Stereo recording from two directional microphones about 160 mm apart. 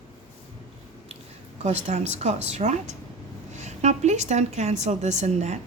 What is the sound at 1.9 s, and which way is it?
A woman's voice, 45° right (ahead or behind).